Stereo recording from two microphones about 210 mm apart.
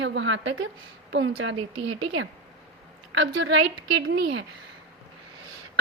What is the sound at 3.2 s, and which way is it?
A woman's voice, 60° right (ahead or behind).